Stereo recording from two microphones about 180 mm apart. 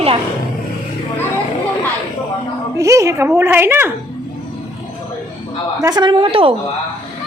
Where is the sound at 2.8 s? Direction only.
15° right (ahead or behind).